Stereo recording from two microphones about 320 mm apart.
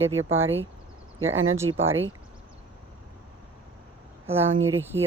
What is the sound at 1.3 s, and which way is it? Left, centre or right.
Speech, right.